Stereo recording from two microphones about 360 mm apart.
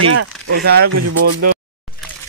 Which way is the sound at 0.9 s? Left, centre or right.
Right.